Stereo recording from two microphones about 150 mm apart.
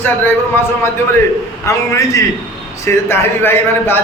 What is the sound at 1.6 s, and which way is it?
A man's voice, 20° left (ahead or behind).